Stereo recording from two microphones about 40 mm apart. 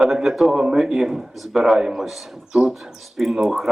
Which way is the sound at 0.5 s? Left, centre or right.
Centre.